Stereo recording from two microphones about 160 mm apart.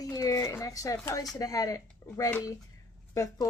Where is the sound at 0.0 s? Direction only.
20° left (ahead or behind).